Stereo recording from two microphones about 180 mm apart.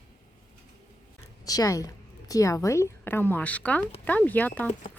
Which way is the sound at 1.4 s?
20° left (ahead or behind).